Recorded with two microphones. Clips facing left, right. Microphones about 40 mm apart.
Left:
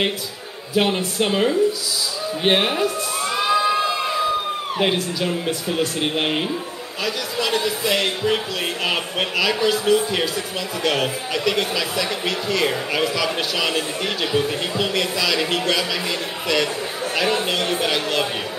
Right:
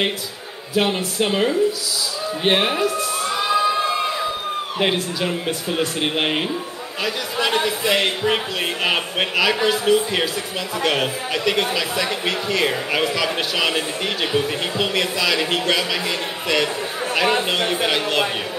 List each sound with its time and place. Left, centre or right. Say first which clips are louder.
0.7 s speech: even; centre
2.4 s a sound: even; centre
4.7 s speech: even; centre
7.3 s speech: right 2 dB; right